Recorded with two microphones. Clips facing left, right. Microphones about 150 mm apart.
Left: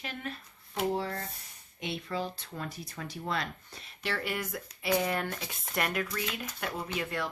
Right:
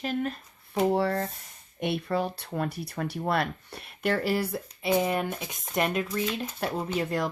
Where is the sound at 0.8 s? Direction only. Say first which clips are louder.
Right 7 dB; 65° right (ahead or behind).